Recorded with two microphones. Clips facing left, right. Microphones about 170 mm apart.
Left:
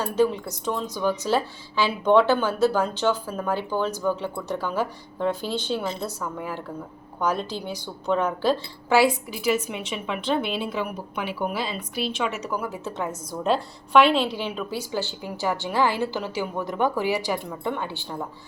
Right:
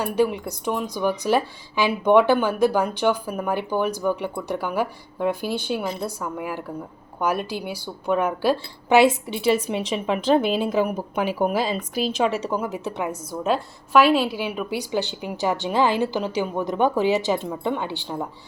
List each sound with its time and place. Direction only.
0.0 s speech: 15° right (ahead or behind)
9.0 s a woman's voice: 25° right (ahead or behind)